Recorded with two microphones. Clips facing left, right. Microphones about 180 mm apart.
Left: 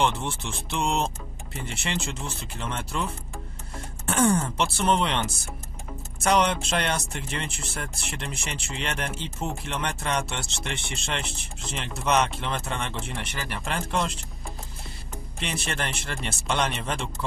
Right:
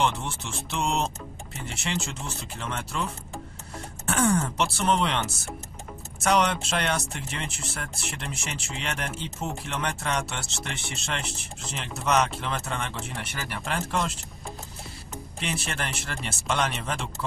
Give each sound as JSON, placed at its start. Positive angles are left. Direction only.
{"t": 0.0, "sound": "speech", "side_deg": 0}
{"t": 4.0, "sound": "speech", "side_deg": 0}
{"t": 15.4, "sound": "speech", "side_deg": 0}